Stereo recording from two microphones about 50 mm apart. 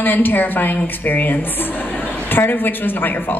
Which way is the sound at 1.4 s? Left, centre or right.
Left.